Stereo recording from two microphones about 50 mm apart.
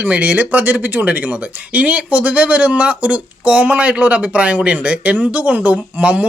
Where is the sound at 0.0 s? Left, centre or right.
Right.